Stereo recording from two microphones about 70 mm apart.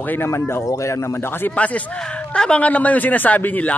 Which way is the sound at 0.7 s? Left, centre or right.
Left.